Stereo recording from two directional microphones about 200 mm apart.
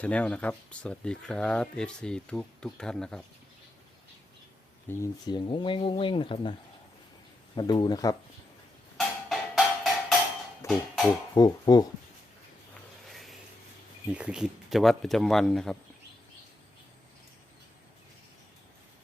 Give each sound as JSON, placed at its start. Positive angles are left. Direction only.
{"t": 0.0, "sound": "speech", "side_deg": 5}
{"t": 4.9, "sound": "speech", "side_deg": 15}
{"t": 9.0, "sound": "music", "side_deg": 0}
{"t": 10.6, "sound": "speech", "side_deg": 15}
{"t": 13.1, "sound": "a sound", "side_deg": 0}
{"t": 14.1, "sound": "speech", "side_deg": -5}